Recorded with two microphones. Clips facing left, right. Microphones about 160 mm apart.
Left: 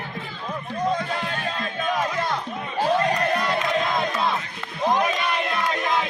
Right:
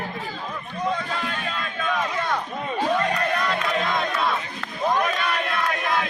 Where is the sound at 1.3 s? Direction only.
35° left (ahead or behind).